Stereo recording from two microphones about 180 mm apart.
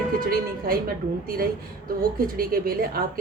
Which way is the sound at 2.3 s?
55° right (ahead or behind).